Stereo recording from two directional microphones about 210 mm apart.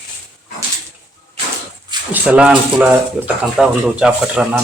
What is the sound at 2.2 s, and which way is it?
Speech, 5° right (ahead or behind).